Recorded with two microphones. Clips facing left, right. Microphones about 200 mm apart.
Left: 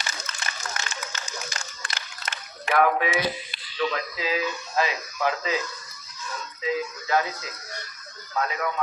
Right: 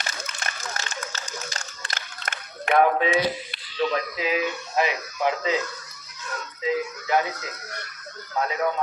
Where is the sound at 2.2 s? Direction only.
55° right (ahead or behind).